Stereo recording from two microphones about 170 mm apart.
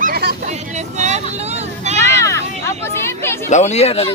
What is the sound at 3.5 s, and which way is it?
Speech, 40° left (ahead or behind).